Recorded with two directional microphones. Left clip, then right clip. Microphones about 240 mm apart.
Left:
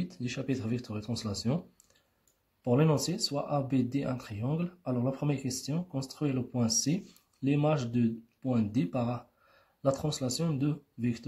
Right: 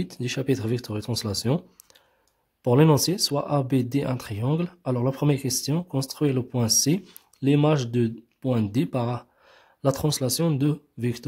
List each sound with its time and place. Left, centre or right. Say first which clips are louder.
0.0 s speech: right 8 dB; right
2.6 s speech: right 8 dB; right